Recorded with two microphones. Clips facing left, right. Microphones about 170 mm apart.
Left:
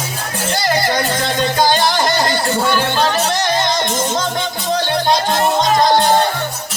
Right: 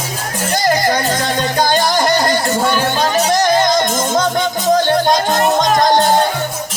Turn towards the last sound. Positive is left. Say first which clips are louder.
# right 1 dB
turn(degrees=-45)  # may be behind; listen again after turning